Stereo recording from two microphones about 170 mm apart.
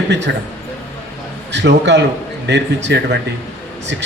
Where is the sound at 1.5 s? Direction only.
90° right.